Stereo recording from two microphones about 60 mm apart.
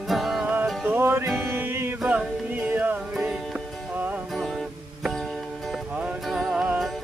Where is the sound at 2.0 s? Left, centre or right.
Centre.